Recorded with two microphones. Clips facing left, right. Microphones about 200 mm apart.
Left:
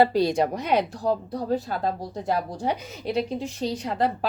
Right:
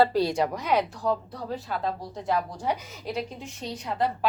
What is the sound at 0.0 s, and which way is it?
Speech, 15° left (ahead or behind).